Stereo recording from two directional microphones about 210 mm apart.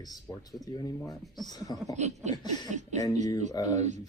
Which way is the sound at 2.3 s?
20° left (ahead or behind).